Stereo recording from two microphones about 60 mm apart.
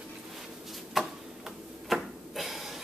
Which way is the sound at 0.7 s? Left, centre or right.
Centre.